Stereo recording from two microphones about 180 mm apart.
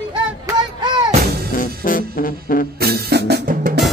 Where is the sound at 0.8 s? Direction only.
25° right (ahead or behind).